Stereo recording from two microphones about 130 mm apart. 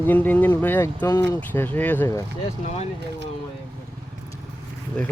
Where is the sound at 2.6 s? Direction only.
55° left (ahead or behind).